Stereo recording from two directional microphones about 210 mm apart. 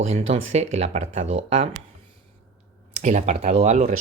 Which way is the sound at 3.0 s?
35° right (ahead or behind).